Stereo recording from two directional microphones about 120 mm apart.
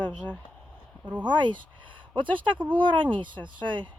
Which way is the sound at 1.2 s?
40° right (ahead or behind).